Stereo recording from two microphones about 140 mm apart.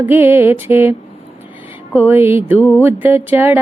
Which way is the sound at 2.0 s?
15° right (ahead or behind).